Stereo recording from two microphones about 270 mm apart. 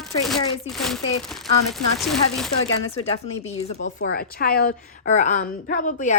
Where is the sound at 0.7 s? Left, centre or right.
Centre.